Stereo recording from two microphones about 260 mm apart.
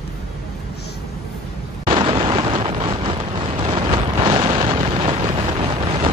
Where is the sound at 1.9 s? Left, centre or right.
Centre.